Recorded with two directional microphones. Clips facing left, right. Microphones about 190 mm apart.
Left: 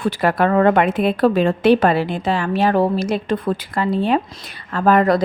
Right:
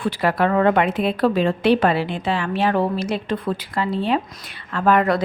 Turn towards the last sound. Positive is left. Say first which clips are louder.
# left 3 dB
turn(degrees=40)  # may be behind; listen again after turning